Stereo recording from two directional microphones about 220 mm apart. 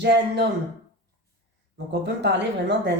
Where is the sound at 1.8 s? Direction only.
50° right (ahead or behind).